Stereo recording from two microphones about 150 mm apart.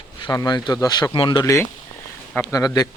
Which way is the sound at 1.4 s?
20° left (ahead or behind).